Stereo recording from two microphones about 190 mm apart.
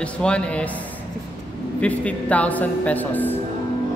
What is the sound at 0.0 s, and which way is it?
Speech, 5° left (ahead or behind).